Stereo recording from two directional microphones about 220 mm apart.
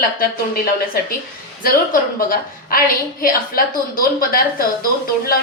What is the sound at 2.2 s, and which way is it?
A woman's voice, 40° left (ahead or behind).